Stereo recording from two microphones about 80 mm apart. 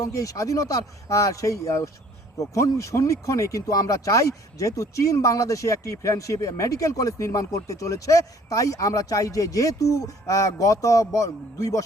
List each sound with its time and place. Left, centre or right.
0.0 s speech: left